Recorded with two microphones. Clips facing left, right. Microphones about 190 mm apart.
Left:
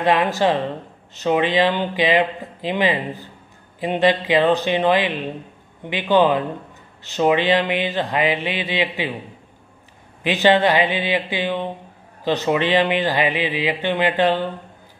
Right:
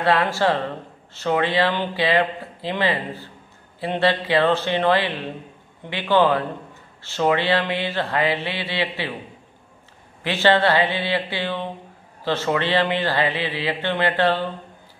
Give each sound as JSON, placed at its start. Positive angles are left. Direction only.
{"t": 0.0, "sound": "speech", "side_deg": 15}
{"t": 10.2, "sound": "speech", "side_deg": 15}